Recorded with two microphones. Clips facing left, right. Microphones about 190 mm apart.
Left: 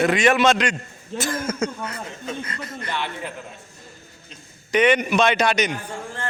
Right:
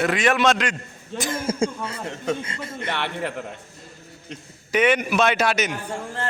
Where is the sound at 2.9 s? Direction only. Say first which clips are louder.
Right 3 dB; 70° right (ahead or behind).